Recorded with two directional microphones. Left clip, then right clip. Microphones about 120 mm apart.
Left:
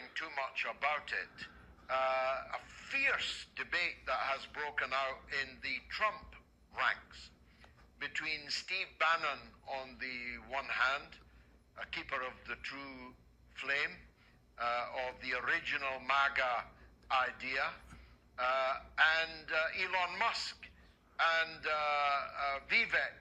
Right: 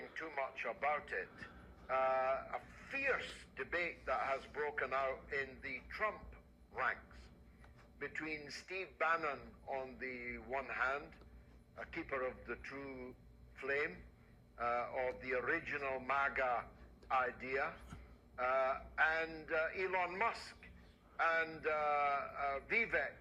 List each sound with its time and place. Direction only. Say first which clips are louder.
0.0 s a man's voice: left 3 dB; 30° left (ahead or behind)